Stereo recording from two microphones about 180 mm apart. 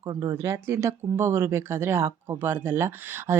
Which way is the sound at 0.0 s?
20° right (ahead or behind).